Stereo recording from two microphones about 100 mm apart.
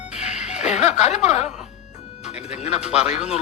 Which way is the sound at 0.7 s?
90° left.